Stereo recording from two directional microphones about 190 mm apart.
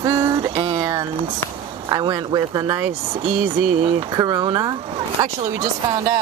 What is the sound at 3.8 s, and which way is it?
Speech, 25° right (ahead or behind).